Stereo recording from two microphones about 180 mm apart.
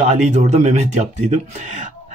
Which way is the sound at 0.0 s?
40° right (ahead or behind).